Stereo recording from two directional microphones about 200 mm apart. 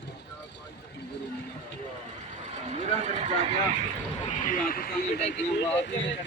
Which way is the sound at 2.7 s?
35° right (ahead or behind).